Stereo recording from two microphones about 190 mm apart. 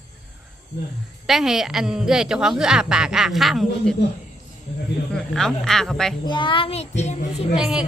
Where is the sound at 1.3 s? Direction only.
Centre (ahead or behind).